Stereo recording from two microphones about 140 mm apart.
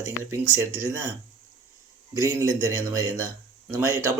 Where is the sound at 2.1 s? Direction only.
20° right (ahead or behind).